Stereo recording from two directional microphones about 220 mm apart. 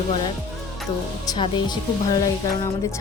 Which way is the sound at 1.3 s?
20° left (ahead or behind).